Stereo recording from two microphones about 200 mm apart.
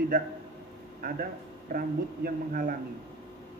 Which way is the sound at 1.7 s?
45° right (ahead or behind).